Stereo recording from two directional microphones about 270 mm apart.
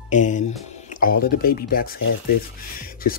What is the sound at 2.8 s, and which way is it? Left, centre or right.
Music, left.